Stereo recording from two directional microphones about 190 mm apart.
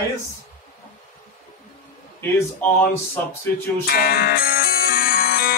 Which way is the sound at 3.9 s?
55° left (ahead or behind).